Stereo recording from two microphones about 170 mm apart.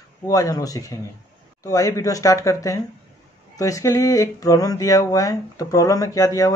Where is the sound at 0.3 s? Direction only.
20° left (ahead or behind).